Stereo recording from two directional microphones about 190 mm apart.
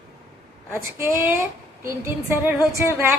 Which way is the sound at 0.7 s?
15° right (ahead or behind).